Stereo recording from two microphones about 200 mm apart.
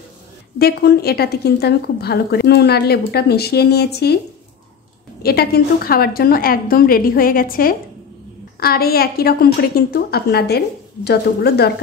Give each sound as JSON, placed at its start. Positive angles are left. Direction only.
{"t": 0.6, "sound": "a woman's voice", "side_deg": 50}
{"t": 5.2, "sound": "a woman's voice", "side_deg": 50}